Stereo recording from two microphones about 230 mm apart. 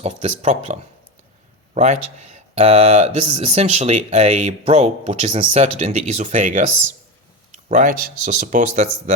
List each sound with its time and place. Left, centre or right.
0.0 s speech: right